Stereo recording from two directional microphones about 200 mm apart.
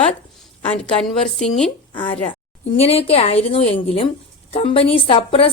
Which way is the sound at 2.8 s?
30° left (ahead or behind).